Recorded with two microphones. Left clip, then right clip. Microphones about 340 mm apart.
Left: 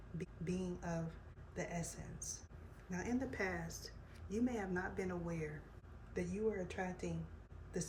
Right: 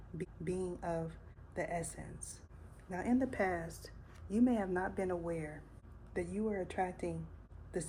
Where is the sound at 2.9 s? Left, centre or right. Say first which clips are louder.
Right 6 dB; centre.